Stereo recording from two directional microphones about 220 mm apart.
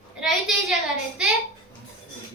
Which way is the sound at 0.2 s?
Centre (ahead or behind).